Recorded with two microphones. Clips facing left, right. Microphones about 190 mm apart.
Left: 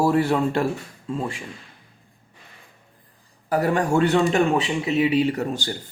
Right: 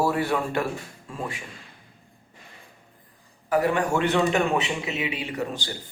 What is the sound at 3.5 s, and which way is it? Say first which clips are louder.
A man's voice: left 2 dB; 40° left (ahead or behind).